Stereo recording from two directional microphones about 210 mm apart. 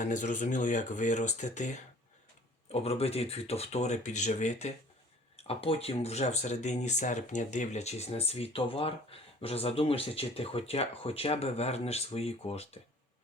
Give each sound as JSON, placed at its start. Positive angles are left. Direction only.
{"t": 0.0, "sound": "speech", "side_deg": 35}